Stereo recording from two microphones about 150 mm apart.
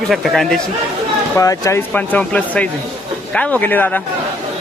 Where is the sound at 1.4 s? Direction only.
20° left (ahead or behind).